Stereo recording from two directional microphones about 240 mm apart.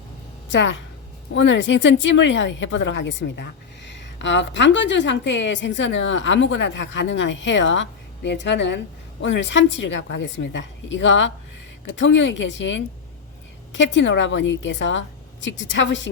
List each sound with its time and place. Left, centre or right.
0.5 s a woman's voice: left